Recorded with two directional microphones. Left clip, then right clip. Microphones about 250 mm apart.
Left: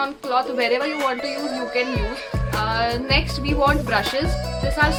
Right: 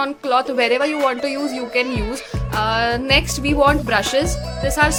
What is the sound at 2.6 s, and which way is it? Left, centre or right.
A woman's voice, right.